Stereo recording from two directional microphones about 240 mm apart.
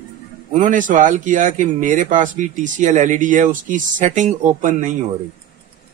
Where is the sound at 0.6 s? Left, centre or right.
Right.